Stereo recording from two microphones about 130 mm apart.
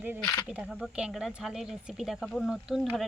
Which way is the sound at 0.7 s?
5° right (ahead or behind).